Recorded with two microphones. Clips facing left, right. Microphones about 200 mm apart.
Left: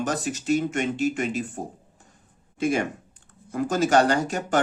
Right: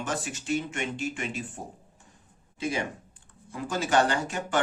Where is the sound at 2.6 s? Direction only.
50° left (ahead or behind).